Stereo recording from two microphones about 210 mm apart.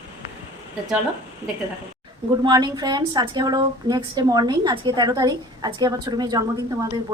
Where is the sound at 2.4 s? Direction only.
20° right (ahead or behind).